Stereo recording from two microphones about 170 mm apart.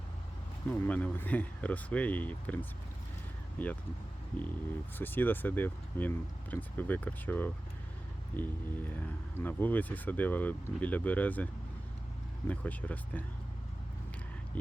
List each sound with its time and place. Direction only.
0.7 s speech: 10° left (ahead or behind)
4.9 s speech: 10° left (ahead or behind)
12.5 s speech: 10° left (ahead or behind)
14.5 s speech: 10° left (ahead or behind)